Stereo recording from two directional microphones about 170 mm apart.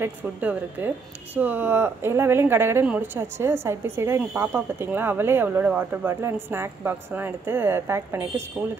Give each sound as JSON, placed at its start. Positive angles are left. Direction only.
{"t": 0.0, "sound": "speech", "side_deg": -10}